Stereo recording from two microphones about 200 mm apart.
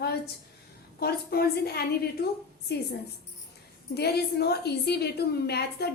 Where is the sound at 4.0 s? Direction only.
55° left (ahead or behind).